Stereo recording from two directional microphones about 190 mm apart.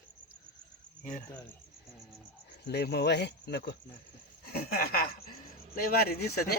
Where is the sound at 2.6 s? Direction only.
60° left (ahead or behind).